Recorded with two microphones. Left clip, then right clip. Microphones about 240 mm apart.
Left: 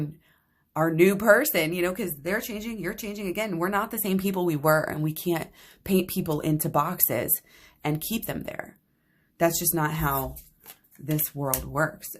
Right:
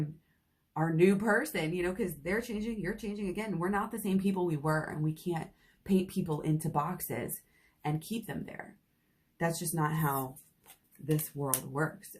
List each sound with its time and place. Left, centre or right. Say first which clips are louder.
0.7 s speech: left 6 dB; left